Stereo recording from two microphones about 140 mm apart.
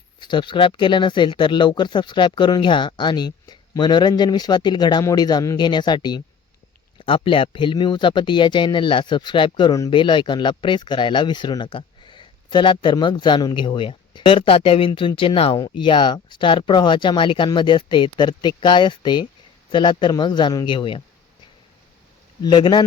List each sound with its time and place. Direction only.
0.2 s speech: 35° left (ahead or behind)
15.5 s speech: 30° left (ahead or behind)
22.4 s speech: 35° left (ahead or behind)